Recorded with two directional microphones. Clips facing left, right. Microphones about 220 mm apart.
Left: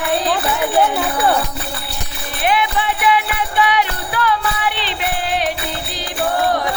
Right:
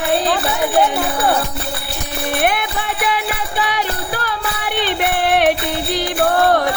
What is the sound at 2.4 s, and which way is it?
Music, 50° right (ahead or behind).